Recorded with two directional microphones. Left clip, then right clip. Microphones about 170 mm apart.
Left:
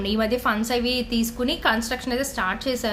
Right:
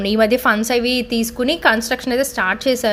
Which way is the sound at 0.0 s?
40° right (ahead or behind).